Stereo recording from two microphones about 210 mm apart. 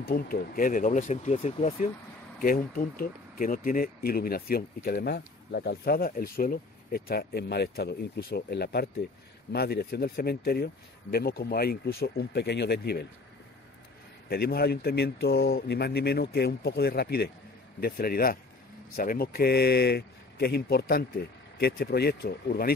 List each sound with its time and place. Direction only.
0.0 s speech: 45° left (ahead or behind); by 1.9 s 30° left (ahead or behind)
2.4 s speech: 45° left (ahead or behind)
14.3 s speech: 50° left (ahead or behind)